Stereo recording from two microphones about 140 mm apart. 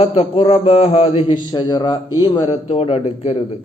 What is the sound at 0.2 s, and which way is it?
A man's voice, 40° left (ahead or behind).